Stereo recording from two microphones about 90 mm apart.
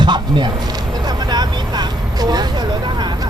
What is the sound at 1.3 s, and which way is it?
Vehicle, 50° right (ahead or behind).